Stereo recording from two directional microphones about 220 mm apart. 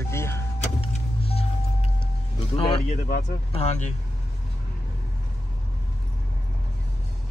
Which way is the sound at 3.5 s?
30° left (ahead or behind).